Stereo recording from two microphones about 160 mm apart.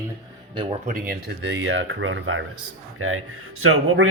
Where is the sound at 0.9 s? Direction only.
65° right (ahead or behind); by 1.8 s 90° right.